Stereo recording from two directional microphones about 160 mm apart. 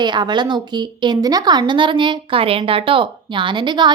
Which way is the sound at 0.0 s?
30° right (ahead or behind).